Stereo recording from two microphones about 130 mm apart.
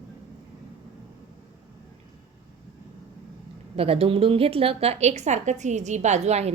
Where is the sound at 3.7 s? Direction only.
50° right (ahead or behind).